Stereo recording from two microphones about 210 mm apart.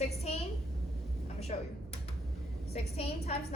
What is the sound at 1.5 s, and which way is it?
Speech, 30° left (ahead or behind).